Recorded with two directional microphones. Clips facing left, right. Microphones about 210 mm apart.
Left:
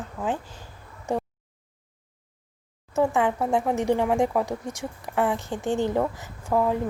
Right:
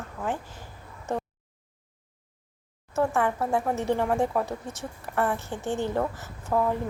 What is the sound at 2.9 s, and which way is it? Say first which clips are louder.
A woman's voice: left 3 dB; 15° left (ahead or behind).